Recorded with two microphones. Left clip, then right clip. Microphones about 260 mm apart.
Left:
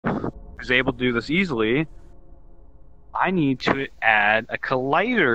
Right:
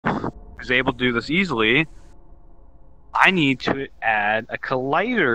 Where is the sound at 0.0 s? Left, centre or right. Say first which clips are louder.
Right 2 dB; centre.